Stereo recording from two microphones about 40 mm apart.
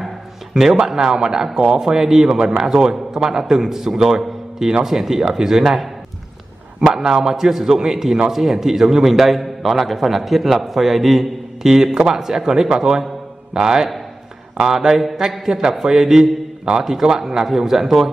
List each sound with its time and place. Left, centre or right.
0.6 s a man's voice: centre